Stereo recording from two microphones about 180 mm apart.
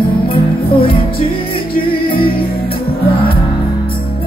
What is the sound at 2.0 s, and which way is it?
Music, 30° left (ahead or behind).